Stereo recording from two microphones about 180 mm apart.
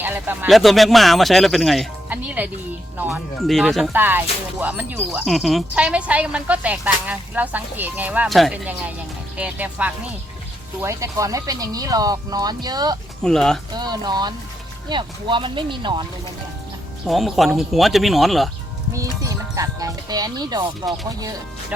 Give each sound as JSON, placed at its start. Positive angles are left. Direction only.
{"t": 0.0, "sound": "speech", "side_deg": -10}
{"t": 0.4, "sound": "speech", "side_deg": 0}
{"t": 3.9, "sound": "speech", "side_deg": -10}
{"t": 13.2, "sound": "speech", "side_deg": 5}
{"t": 13.7, "sound": "speech", "side_deg": -25}
{"t": 17.1, "sound": "speech", "side_deg": 0}
{"t": 19.2, "sound": "speech", "side_deg": -20}